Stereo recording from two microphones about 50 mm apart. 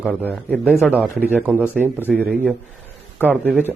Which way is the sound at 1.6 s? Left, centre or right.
Right.